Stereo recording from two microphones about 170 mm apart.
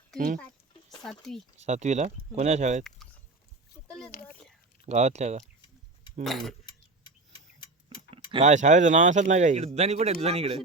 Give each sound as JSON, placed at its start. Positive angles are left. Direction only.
{"t": 1.5, "sound": "speech", "side_deg": -40}
{"t": 3.8, "sound": "oink", "side_deg": 5}
{"t": 4.3, "sound": "a sound", "side_deg": 5}
{"t": 4.9, "sound": "speech", "side_deg": -40}
{"t": 6.2, "sound": "speech", "side_deg": 0}
{"t": 6.7, "sound": "tick-tock", "side_deg": 25}
{"t": 7.9, "sound": "speech", "side_deg": -30}